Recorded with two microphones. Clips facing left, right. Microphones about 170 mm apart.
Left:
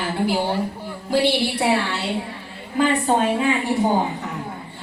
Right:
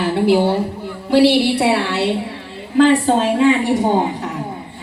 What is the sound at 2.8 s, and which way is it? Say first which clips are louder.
A woman's voice: right 6 dB; 90° right.